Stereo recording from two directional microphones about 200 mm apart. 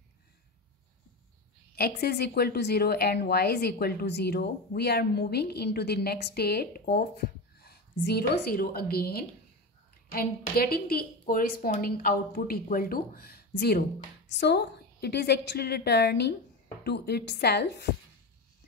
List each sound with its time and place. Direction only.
1.8 s a woman's voice: 55° left (ahead or behind)